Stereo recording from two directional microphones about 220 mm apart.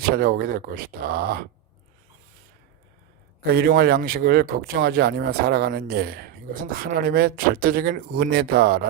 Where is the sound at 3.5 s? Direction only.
45° right (ahead or behind).